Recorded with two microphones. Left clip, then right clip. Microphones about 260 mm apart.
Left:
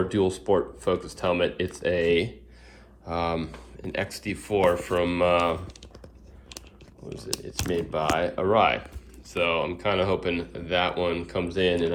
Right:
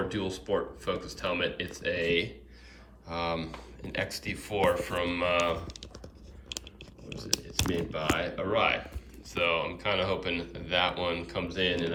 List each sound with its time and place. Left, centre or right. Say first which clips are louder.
0.1 s speech: left 9 dB; centre
0.3 s speech: left 4 dB; left
1.2 s speech: left 6 dB; centre
7.1 s speech: right 1 dB; centre